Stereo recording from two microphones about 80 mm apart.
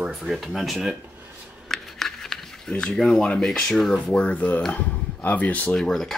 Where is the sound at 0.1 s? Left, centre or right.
Centre.